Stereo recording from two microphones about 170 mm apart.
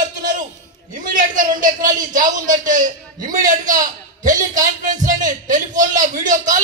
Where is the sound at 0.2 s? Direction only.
50° right (ahead or behind).